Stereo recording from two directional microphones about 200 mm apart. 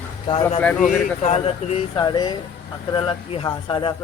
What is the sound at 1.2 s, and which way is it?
A man's voice, 35° left (ahead or behind).